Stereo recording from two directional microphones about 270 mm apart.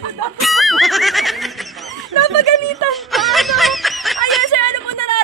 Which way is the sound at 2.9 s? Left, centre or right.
Centre.